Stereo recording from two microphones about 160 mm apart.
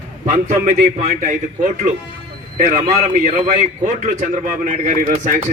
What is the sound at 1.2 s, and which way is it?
A man's voice, 50° right (ahead or behind).